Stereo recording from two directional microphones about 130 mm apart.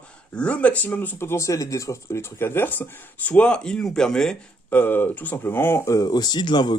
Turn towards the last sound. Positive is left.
turn(degrees=35)  # may be behind; listen again after turning